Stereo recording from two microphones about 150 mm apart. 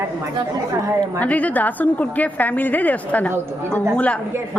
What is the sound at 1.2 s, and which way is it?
A woman's voice, 10° left (ahead or behind).